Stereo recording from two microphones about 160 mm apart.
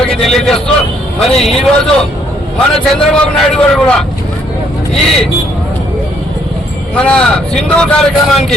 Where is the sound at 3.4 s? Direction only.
5° left (ahead or behind).